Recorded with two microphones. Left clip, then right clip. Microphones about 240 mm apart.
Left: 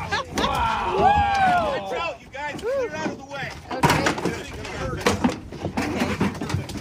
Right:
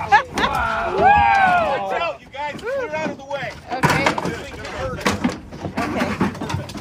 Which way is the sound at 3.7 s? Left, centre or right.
Centre.